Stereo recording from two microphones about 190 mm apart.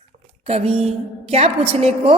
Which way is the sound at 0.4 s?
30° right (ahead or behind).